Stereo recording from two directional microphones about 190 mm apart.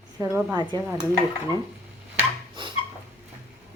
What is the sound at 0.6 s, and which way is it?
Speech, 25° right (ahead or behind).